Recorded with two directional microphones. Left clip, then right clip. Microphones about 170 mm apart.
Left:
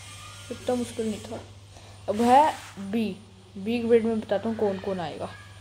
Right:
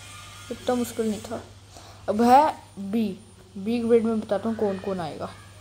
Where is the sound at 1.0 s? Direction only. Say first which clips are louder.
Right 3 dB; 5° right (ahead or behind).